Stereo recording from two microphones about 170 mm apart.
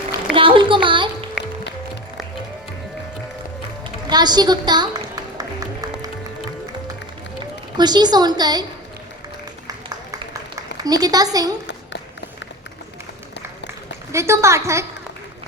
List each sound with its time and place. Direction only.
0.3 s a sound: 30° right (ahead or behind)
4.1 s music: 25° right (ahead or behind)
7.8 s a woman's voice: 25° right (ahead or behind)
10.5 s a woman's voice: 20° right (ahead or behind)
14.1 s a woman's voice: 15° right (ahead or behind)